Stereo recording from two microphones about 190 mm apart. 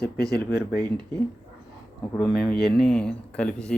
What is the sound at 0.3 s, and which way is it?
Speech, 60° left (ahead or behind).